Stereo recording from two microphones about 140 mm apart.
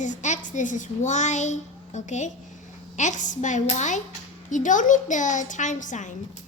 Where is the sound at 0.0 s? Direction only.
60° left (ahead or behind).